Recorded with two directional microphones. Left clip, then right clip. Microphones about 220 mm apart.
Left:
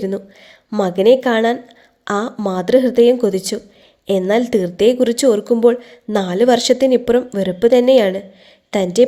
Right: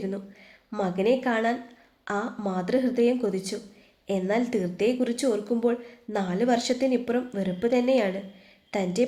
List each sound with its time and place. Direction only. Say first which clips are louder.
0.7 s a woman's voice: left 12 dB; 40° left (ahead or behind)